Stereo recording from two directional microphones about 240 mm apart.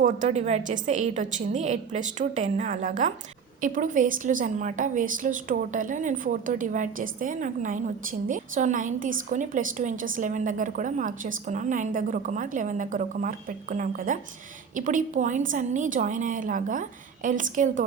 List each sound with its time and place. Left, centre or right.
0.0 s a woman's voice: right